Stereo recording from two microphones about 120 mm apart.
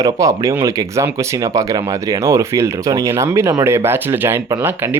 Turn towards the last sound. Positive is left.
turn(degrees=-20)  # may be behind; listen again after turning